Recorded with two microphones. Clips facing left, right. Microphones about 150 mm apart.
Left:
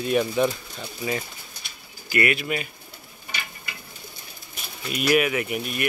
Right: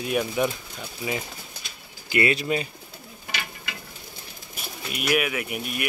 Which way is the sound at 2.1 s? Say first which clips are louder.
Right 1 dB; 25° right (ahead or behind).